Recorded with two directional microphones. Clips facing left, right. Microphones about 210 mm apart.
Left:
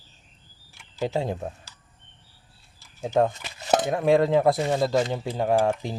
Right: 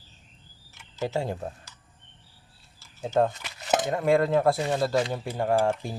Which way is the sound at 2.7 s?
15° left (ahead or behind).